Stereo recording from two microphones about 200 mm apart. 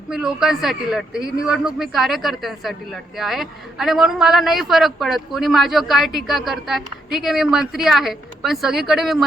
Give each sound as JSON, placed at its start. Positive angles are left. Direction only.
{"t": 0.1, "sound": "speech", "side_deg": -5}